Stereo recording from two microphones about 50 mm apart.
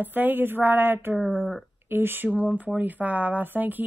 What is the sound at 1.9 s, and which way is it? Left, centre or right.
Speech, right.